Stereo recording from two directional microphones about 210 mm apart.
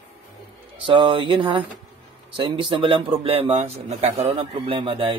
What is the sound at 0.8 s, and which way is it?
Speech, 25° right (ahead or behind).